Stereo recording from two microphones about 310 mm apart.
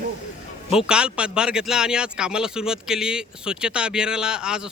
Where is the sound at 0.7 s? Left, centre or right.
Centre.